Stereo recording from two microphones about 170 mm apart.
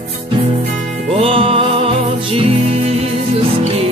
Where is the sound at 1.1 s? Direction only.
35° right (ahead or behind).